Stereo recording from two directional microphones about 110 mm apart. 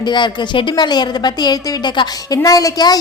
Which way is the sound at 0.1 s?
45° left (ahead or behind).